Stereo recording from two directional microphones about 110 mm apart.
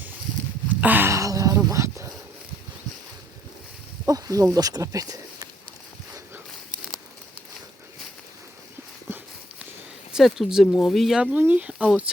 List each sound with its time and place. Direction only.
0.8 s a sound: 15° right (ahead or behind)
4.0 s snake: 30° right (ahead or behind)
4.5 s speech: 35° right (ahead or behind)
9.0 s clip-clop: 15° right (ahead or behind)
10.1 s speech: 5° right (ahead or behind)